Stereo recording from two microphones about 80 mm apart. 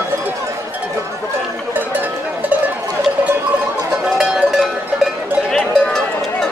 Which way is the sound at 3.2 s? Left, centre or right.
Right.